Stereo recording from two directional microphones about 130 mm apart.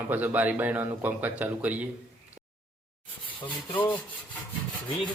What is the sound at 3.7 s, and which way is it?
Rub, 40° left (ahead or behind).